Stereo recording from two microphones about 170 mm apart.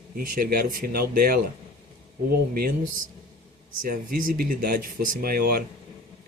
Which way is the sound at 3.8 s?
55° right (ahead or behind).